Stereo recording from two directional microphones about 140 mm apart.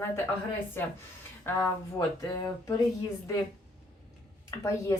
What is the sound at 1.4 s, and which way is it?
A woman's voice, 15° left (ahead or behind).